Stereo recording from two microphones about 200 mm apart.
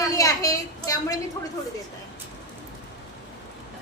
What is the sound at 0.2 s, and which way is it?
A woman's voice, 15° left (ahead or behind).